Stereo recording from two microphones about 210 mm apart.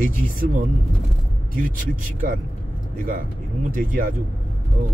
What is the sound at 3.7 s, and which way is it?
Speech, 40° right (ahead or behind).